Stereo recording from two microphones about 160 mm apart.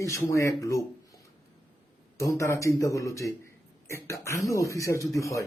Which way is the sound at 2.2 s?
20° left (ahead or behind).